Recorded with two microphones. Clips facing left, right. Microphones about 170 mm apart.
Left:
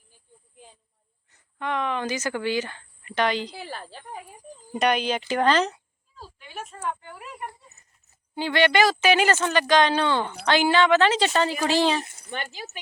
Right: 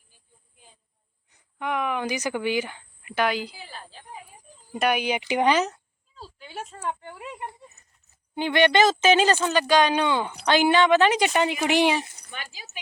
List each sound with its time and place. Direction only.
1.3 s speech: 10° right (ahead or behind)
3.5 s a woman's voice: 75° left (ahead or behind)
4.7 s speech: 5° right (ahead or behind)
6.1 s a woman's voice: 30° right (ahead or behind)
7.2 s a sound: 25° right (ahead or behind)
8.4 s speech: 20° right (ahead or behind)
12.3 s speech: 55° left (ahead or behind)